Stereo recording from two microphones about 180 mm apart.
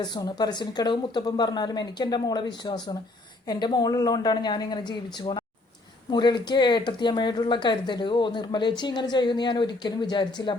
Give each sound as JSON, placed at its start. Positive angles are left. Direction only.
{"t": 0.0, "sound": "speech", "side_deg": 25}